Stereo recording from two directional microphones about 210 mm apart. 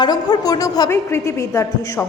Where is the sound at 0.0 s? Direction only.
20° left (ahead or behind).